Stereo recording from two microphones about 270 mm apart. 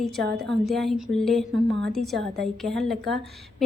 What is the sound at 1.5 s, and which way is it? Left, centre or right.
Speech, right.